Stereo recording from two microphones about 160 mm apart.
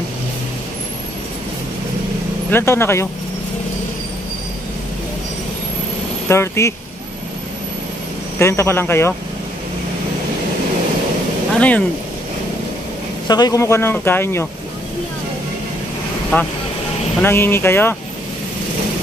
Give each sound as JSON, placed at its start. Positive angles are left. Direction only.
{"t": 2.5, "sound": "speech", "side_deg": 15}
{"t": 6.2, "sound": "speech", "side_deg": 15}
{"t": 8.4, "sound": "speech", "side_deg": 15}
{"t": 11.5, "sound": "speech", "side_deg": 10}
{"t": 13.3, "sound": "speech", "side_deg": 25}
{"t": 16.3, "sound": "speech", "side_deg": 10}